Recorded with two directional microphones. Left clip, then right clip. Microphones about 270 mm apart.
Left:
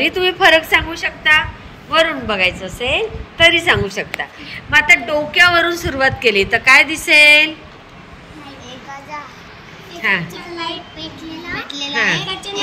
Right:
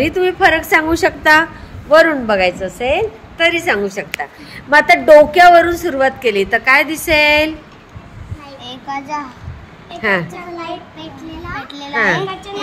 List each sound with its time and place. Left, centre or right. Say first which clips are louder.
0.0 s a woman's voice: even; centre
10.0 s a woman's voice: right 1 dB; centre